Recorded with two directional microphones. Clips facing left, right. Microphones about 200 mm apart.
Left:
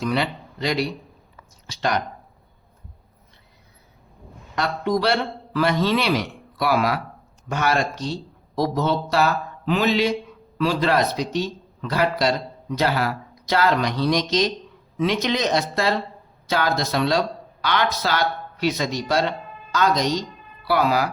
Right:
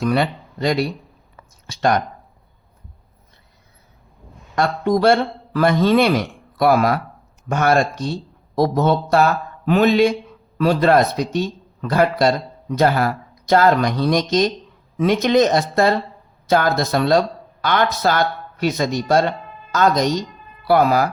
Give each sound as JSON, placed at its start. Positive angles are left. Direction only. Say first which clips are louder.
{"t": 0.0, "sound": "speech", "louder": "right 5 dB", "side_deg": -50}
{"t": 4.5, "sound": "a man's voice", "louder": "right 4 dB", "side_deg": -50}